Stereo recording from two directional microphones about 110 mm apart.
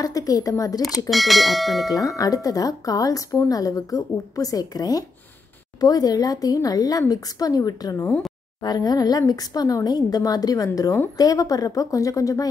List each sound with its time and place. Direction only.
0.0 s speech: 35° left (ahead or behind)
1.1 s speech: centre (ahead or behind)
1.9 s speech: 30° left (ahead or behind)